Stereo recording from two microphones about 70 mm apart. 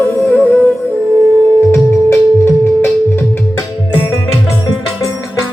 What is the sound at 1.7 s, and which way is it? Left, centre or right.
Music, left.